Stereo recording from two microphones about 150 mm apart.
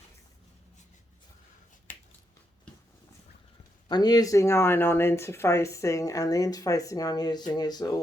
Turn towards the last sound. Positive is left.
turn(degrees=25)  # may be behind; listen again after turning